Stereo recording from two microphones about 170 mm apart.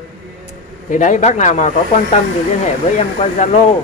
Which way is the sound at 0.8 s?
50° left (ahead or behind).